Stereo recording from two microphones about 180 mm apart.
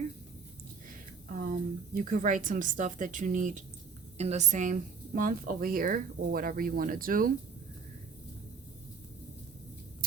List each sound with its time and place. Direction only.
1.3 s a woman's voice: 50° right (ahead or behind)